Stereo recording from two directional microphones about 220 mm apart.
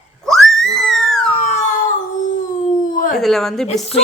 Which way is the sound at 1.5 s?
30° left (ahead or behind).